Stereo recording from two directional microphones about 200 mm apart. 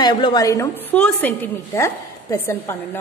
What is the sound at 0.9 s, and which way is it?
A woman's voice, 5° left (ahead or behind).